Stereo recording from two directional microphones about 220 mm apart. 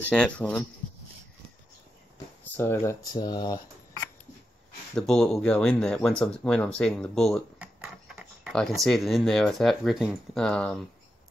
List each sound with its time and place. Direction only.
0.1 s speech: 5° left (ahead or behind)
2.4 s speech: 10° left (ahead or behind)
4.9 s speech: 5° left (ahead or behind)